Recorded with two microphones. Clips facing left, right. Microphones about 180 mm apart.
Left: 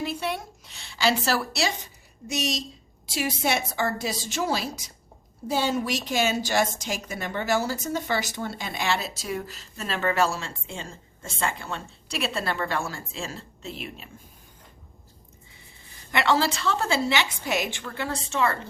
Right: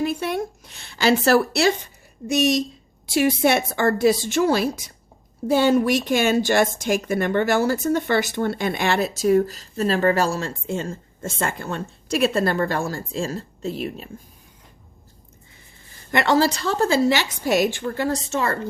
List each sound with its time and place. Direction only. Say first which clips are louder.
0.0 s a woman's voice: right 6 dB; 50° right (ahead or behind)
16.1 s a woman's voice: right 5 dB; 45° right (ahead or behind)